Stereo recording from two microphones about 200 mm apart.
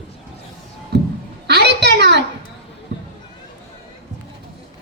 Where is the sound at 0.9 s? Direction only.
55° right (ahead or behind).